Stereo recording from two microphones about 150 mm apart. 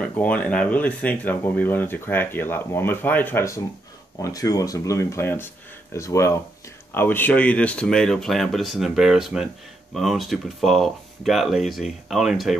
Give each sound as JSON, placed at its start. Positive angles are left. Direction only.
{"t": 0.1, "sound": "speech", "side_deg": 10}